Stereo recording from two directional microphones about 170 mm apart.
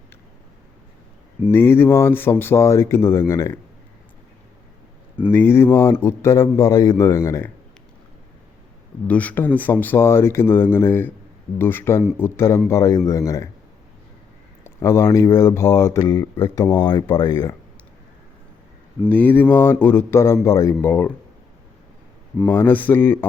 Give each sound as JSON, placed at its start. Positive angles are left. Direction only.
{"t": 1.5, "sound": "speech", "side_deg": 15}
{"t": 5.3, "sound": "a man's voice", "side_deg": 15}
{"t": 9.0, "sound": "a man's voice", "side_deg": 10}
{"t": 14.6, "sound": "a man's voice", "side_deg": 15}
{"t": 19.0, "sound": "speech", "side_deg": 10}
{"t": 22.4, "sound": "speech", "side_deg": 10}